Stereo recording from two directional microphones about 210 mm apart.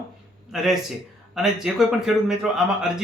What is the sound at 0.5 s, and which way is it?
Speech, centre (ahead or behind).